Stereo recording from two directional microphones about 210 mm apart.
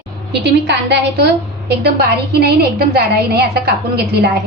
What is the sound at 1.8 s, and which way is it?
A woman's voice, 50° right (ahead or behind).